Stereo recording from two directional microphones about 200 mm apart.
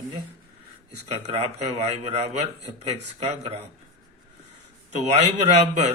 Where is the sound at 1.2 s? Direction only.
30° right (ahead or behind).